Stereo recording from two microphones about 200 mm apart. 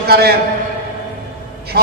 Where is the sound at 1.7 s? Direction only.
50° right (ahead or behind).